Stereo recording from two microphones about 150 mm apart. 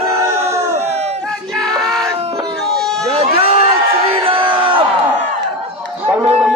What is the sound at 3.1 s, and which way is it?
Run, 40° right (ahead or behind).